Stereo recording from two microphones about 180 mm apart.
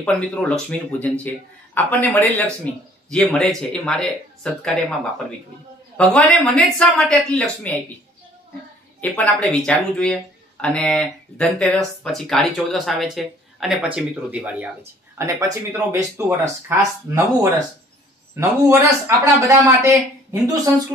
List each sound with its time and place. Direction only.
0.0 s speech: 5° left (ahead or behind)
5.9 s speech: 5° left (ahead or behind)
9.0 s speech: 5° left (ahead or behind); by 20.0 s 15° right (ahead or behind)